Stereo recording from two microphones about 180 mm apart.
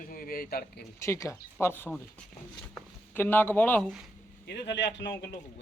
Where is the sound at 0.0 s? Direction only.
50° left (ahead or behind).